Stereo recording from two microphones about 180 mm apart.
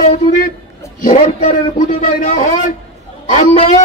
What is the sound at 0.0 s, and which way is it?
A man's voice, 50° left (ahead or behind).